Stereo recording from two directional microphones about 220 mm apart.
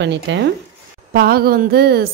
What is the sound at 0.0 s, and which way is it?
A woman's voice, 55° right (ahead or behind).